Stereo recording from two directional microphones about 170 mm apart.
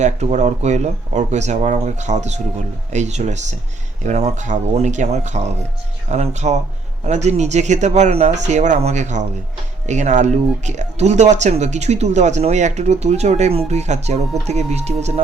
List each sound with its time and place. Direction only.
0.0 s speech: 40° right (ahead or behind)